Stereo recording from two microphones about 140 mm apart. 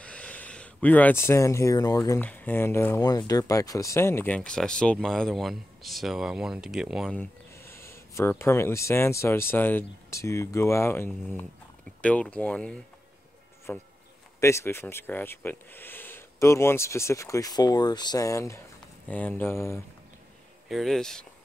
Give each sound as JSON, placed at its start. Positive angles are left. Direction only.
{"t": 0.0, "sound": "speech", "side_deg": 10}
{"t": 2.1, "sound": "speech", "side_deg": 10}
{"t": 3.0, "sound": "speech", "side_deg": 25}
{"t": 7.2, "sound": "speech", "side_deg": 15}
{"t": 20.6, "sound": "speech", "side_deg": 0}